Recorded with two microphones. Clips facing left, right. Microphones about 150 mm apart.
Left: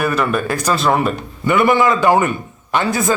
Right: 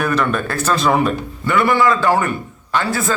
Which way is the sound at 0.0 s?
5° left (ahead or behind).